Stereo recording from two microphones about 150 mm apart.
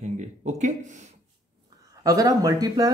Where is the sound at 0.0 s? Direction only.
50° right (ahead or behind).